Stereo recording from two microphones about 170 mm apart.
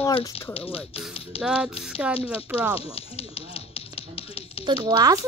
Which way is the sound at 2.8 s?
35° left (ahead or behind).